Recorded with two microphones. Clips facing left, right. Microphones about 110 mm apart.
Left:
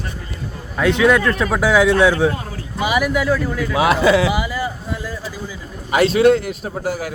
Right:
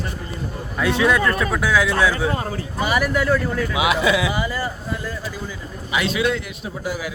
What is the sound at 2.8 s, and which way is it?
Speech, 10° left (ahead or behind).